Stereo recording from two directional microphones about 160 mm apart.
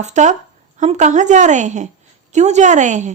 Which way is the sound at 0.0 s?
50° right (ahead or behind).